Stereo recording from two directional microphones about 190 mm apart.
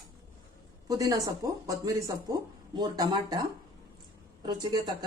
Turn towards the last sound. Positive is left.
turn(degrees=-20)  # may be behind; listen again after turning